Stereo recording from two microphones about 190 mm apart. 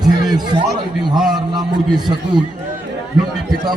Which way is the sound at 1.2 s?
Centre (ahead or behind).